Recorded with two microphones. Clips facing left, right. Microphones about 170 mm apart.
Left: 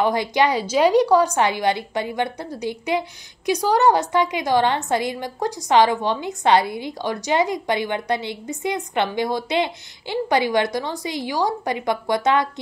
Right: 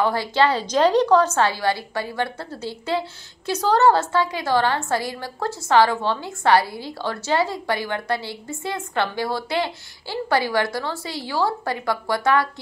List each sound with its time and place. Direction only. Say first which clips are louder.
0.0 s a woman's voice: left 1 dB; 20° left (ahead or behind)